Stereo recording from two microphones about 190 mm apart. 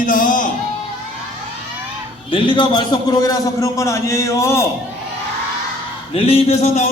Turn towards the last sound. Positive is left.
turn(degrees=35)  # may be behind; listen again after turning